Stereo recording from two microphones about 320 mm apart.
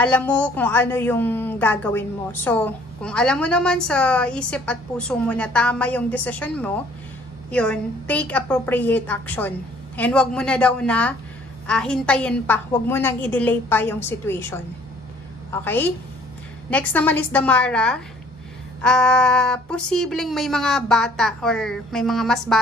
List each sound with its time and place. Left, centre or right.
0.0 s a woman's voice: centre